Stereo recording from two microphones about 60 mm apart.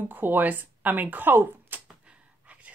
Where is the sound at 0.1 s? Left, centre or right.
Right.